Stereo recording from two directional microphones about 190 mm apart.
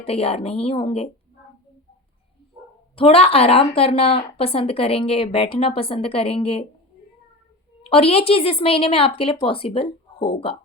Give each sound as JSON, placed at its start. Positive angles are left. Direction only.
{"t": 0.0, "sound": "a woman's voice", "side_deg": 30}
{"t": 2.9, "sound": "a woman's voice", "side_deg": 30}
{"t": 7.9, "sound": "speech", "side_deg": 30}